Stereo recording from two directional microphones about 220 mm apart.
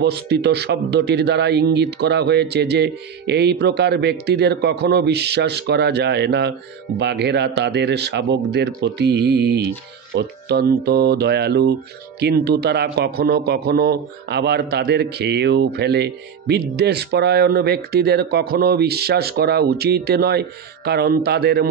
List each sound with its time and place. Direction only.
0.0 s a man's voice: 50° right (ahead or behind)